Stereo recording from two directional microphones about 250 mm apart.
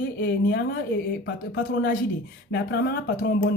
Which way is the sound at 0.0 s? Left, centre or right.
Left.